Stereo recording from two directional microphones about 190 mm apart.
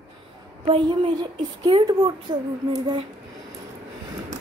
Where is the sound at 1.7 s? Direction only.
25° right (ahead or behind).